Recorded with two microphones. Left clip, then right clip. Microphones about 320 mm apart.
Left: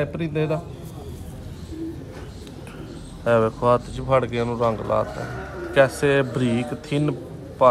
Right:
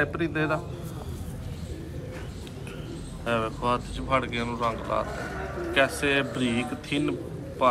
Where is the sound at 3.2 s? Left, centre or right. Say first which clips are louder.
Left 8 dB; left.